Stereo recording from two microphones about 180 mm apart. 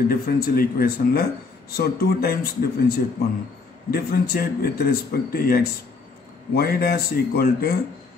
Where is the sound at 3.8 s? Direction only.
60° left (ahead or behind).